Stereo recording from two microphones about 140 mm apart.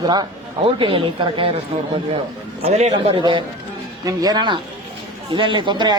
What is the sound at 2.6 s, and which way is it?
Speech, 50° right (ahead or behind).